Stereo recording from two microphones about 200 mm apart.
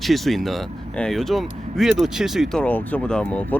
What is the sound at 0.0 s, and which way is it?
Speech, centre (ahead or behind).